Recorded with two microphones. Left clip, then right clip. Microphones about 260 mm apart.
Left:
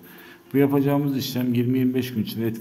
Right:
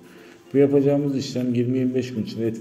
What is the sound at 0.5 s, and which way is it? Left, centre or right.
A man's voice, centre.